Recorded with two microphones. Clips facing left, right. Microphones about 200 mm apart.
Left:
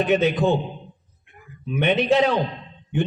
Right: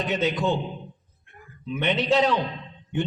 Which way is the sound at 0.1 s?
55° left (ahead or behind).